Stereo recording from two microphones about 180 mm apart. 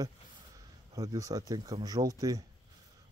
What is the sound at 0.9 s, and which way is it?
Speech, 20° right (ahead or behind).